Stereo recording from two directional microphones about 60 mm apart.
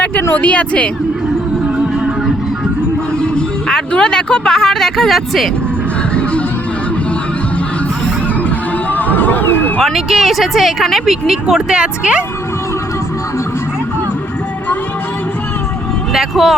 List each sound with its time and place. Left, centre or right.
0.3 s speech: left
3.2 s speech: centre
8.4 s music: left
9.8 s speech: centre
16.1 s speech: centre